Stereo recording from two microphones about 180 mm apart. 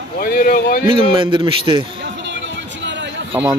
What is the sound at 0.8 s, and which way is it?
A man's voice, 30° right (ahead or behind).